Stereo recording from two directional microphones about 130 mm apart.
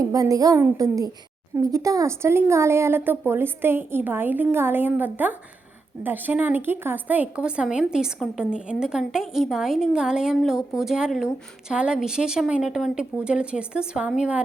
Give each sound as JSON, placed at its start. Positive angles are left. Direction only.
{"t": 0.0, "sound": "a woman's voice", "side_deg": -25}